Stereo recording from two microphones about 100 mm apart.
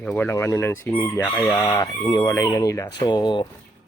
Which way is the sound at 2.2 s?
30° left (ahead or behind).